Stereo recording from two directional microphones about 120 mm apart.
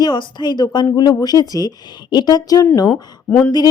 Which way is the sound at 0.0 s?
40° left (ahead or behind).